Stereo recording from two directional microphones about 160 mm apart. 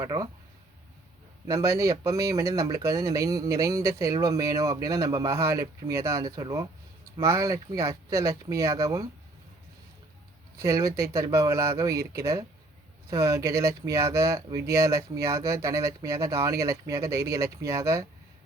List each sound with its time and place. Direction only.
0.0 s speech: 25° right (ahead or behind)
1.5 s speech: 20° right (ahead or behind)
10.6 s speech: 20° right (ahead or behind)